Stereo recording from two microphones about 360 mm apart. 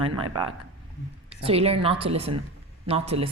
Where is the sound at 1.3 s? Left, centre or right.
Centre.